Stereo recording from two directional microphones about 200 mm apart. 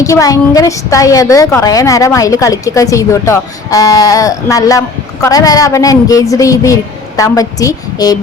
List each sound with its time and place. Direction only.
0.0 s a woman's voice: 15° left (ahead or behind)